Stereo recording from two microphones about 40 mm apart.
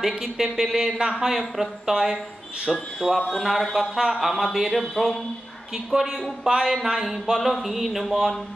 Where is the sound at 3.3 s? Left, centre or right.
Centre.